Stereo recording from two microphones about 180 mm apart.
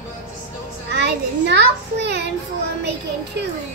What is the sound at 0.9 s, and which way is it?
A child's voice, 70° right (ahead or behind).